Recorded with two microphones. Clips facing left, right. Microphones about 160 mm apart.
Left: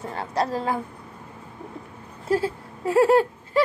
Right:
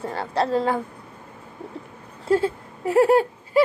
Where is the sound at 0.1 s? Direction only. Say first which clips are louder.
Right 3 dB; 30° right (ahead or behind).